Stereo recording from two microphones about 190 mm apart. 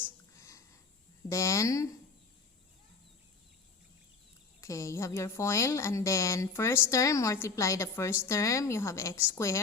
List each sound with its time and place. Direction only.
0.0 s a sound: 15° left (ahead or behind)
1.3 s a woman's voice: 15° left (ahead or behind)
4.6 s a woman's voice: 15° left (ahead or behind)